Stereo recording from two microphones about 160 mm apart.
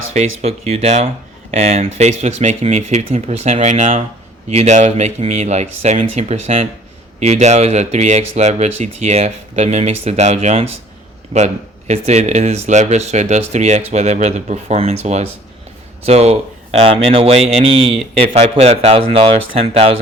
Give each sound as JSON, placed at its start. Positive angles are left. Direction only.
{"t": 0.1, "sound": "speech", "side_deg": -45}